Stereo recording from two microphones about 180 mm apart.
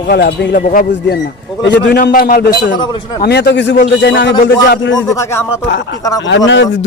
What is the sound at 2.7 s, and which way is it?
Speech, 20° left (ahead or behind).